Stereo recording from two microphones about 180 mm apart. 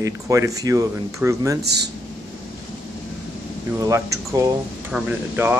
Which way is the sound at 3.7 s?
20° right (ahead or behind).